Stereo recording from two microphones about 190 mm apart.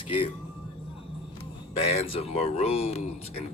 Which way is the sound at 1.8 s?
30° left (ahead or behind).